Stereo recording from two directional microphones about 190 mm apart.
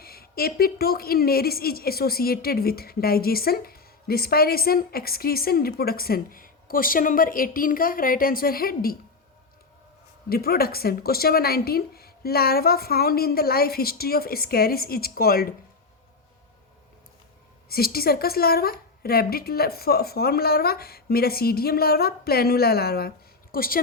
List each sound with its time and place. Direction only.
0.0 s a woman's voice: 50° left (ahead or behind)
10.2 s a woman's voice: 55° left (ahead or behind)
17.7 s a woman's voice: 55° left (ahead or behind)